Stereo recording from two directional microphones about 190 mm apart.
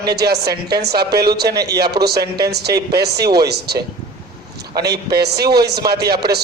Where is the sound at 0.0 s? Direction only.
60° right (ahead or behind).